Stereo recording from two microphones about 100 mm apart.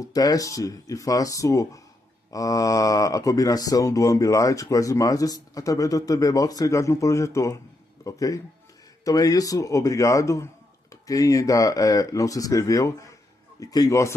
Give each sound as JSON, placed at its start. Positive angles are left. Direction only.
{"t": 0.0, "sound": "speech", "side_deg": 35}